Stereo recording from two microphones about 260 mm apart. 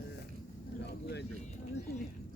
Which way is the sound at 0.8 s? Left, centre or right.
Left.